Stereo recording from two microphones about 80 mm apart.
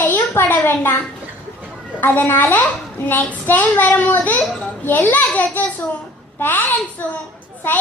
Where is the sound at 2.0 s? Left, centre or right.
Left.